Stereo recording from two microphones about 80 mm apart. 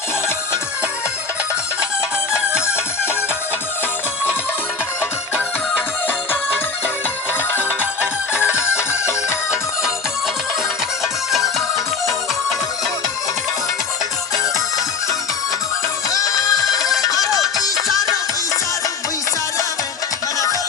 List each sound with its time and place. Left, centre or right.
2.6 s music: left
7.5 s music: left
8.9 s music: left
11.3 s music: centre
16.0 s music: left